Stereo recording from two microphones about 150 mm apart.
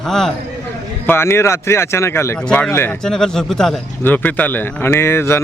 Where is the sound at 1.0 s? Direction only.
15° left (ahead or behind).